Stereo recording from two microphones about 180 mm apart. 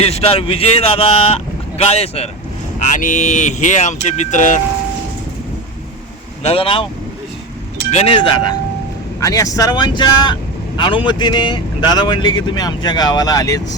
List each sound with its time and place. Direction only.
0.0 s speech: 35° left (ahead or behind)
6.4 s speech: 30° left (ahead or behind)
7.9 s speech: 35° left (ahead or behind)
9.2 s speech: 20° left (ahead or behind)